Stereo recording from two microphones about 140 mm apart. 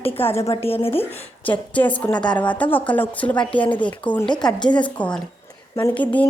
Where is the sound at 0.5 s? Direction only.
45° left (ahead or behind).